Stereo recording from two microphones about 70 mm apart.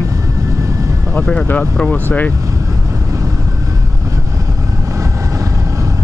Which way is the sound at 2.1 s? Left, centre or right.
Left.